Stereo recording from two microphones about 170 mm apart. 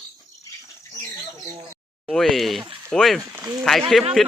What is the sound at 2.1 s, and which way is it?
Speech, centre (ahead or behind).